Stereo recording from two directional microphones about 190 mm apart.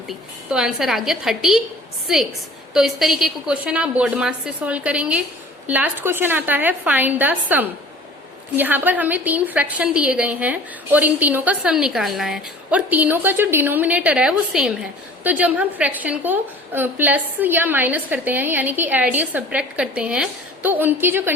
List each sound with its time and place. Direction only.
0.1 s a woman's voice: centre (ahead or behind)